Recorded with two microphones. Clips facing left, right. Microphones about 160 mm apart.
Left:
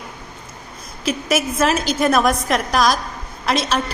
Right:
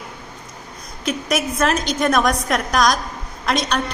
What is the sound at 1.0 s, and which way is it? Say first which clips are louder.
A woman's voice: left 1 dB; 5° left (ahead or behind).